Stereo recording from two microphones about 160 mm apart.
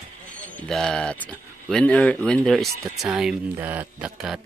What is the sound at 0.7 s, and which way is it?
Speech, 5° left (ahead or behind).